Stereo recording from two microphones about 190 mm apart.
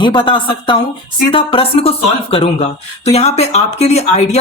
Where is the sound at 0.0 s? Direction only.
25° left (ahead or behind).